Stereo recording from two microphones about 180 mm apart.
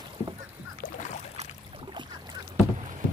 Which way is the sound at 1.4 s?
35° right (ahead or behind).